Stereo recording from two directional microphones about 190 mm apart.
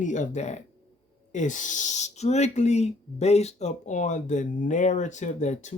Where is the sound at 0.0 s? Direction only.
40° left (ahead or behind).